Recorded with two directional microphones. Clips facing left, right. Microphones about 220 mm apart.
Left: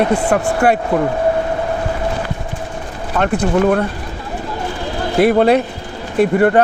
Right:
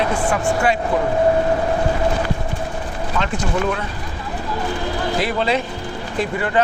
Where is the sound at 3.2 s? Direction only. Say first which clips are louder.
Left 8 dB; 55° left (ahead or behind).